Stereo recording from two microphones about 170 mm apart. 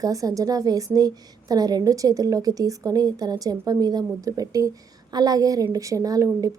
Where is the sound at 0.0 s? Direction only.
20° right (ahead or behind).